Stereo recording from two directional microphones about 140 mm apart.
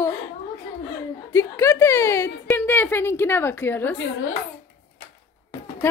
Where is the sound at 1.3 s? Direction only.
20° left (ahead or behind).